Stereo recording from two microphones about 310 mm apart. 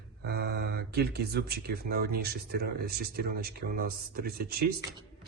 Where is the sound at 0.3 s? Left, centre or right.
Right.